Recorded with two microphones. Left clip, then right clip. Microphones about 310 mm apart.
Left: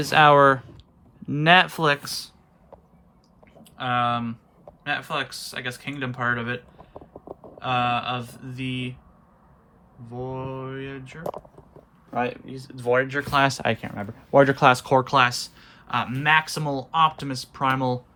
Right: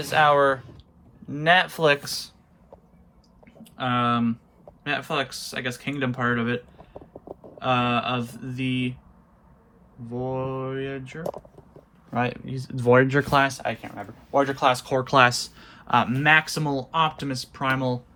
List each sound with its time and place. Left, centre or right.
0.0 s speech: centre
3.6 s speech: centre
6.9 s clip-clop: right
7.6 s speech: centre
10.1 s speech: centre
12.1 s speech: right
13.5 s speech: left
15.0 s speech: centre